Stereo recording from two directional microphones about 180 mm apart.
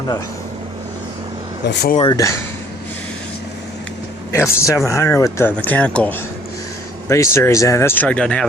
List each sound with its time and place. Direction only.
1.6 s speech: 65° left (ahead or behind)
2.0 s speech: 20° left (ahead or behind)
4.3 s speech: 15° left (ahead or behind)